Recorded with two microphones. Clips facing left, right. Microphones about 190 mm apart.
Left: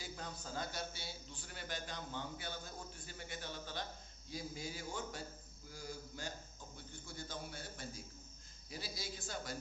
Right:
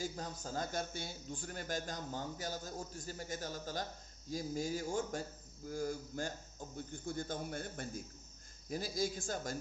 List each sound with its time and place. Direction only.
0.0 s a man's voice: 45° right (ahead or behind)